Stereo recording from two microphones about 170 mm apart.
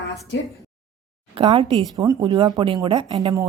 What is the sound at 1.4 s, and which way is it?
Speech, 30° right (ahead or behind).